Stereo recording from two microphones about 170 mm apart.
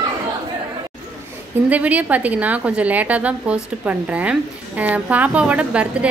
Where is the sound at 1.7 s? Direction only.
10° right (ahead or behind).